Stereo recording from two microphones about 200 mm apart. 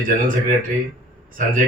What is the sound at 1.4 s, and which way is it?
Speech, 40° right (ahead or behind).